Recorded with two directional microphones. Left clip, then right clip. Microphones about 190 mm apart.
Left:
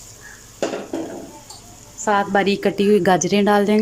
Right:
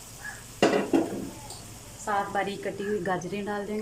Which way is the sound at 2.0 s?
60° left (ahead or behind).